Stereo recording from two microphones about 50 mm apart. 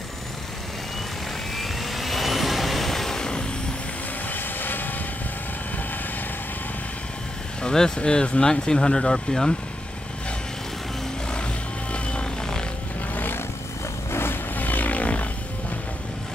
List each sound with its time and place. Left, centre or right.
1.6 s vehicle: centre
4.3 s vehicle: left
7.6 s speech: centre
11.9 s vehicle: left
13.1 s vehicle: left
14.1 s vehicle: left
14.5 s vehicle: left